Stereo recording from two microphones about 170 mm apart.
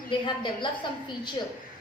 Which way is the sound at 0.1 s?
30° left (ahead or behind).